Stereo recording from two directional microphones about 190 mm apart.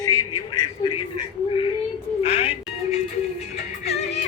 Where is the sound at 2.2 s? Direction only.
30° left (ahead or behind).